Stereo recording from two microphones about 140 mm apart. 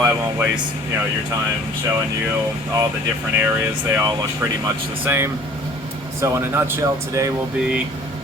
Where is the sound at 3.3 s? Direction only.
15° right (ahead or behind).